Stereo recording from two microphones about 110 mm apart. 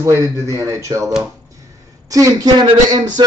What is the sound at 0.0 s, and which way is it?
Speech, 30° right (ahead or behind).